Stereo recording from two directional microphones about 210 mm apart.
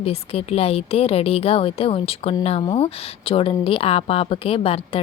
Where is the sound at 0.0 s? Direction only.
30° left (ahead or behind).